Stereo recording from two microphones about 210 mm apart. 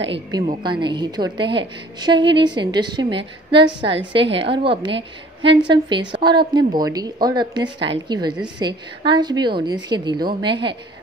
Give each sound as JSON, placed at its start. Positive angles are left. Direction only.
{"t": 0.1, "sound": "a woman's voice", "side_deg": -25}